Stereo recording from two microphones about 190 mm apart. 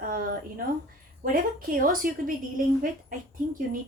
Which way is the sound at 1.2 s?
45° right (ahead or behind).